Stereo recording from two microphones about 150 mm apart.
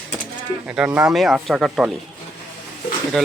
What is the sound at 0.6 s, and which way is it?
Speech, 10° right (ahead or behind).